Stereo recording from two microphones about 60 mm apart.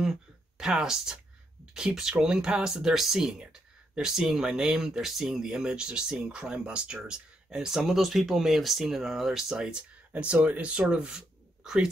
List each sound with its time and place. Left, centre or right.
0.0 s speech: centre
10.1 s speech: right